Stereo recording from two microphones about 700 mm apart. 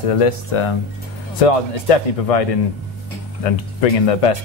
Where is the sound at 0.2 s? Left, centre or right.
Left.